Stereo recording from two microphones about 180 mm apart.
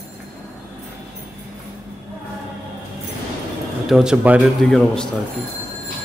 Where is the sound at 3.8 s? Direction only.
5° right (ahead or behind).